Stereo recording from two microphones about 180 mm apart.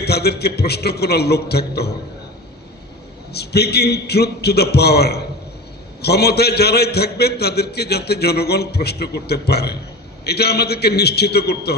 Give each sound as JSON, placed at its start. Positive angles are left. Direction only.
{"t": 0.0, "sound": "a man's voice", "side_deg": 65}
{"t": 3.3, "sound": "a man's voice", "side_deg": 65}